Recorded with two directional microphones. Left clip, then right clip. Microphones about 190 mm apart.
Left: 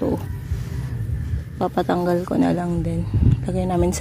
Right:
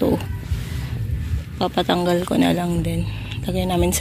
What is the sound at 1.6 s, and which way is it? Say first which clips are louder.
Speech: right 1 dB; 15° left (ahead or behind).